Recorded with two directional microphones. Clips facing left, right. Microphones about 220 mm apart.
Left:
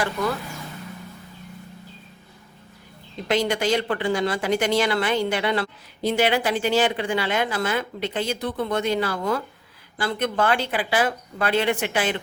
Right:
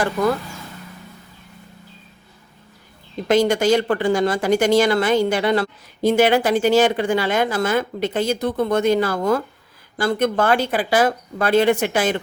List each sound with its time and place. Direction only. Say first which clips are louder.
3.2 s speech: right 6 dB; 45° right (ahead or behind)